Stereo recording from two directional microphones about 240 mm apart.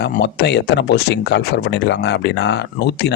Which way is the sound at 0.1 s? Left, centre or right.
Left.